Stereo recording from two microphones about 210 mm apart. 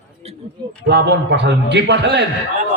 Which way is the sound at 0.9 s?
55° right (ahead or behind).